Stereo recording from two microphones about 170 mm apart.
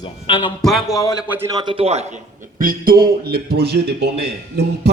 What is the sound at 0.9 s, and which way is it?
Speech, 20° left (ahead or behind).